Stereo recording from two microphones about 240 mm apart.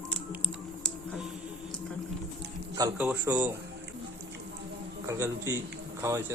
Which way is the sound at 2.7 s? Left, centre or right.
Centre.